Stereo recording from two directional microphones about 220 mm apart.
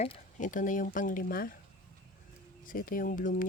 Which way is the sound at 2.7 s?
40° left (ahead or behind).